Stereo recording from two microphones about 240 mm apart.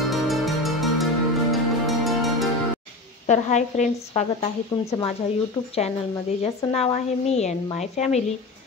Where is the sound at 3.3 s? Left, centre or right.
Left.